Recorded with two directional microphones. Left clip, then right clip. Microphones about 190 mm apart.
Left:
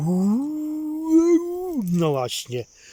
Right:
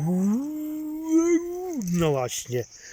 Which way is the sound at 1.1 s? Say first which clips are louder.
Left 4 dB; 10° left (ahead or behind).